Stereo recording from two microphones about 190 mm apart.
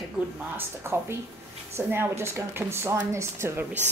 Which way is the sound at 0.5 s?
15° right (ahead or behind).